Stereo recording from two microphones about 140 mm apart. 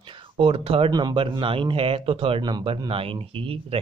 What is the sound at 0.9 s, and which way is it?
Speech, 30° right (ahead or behind).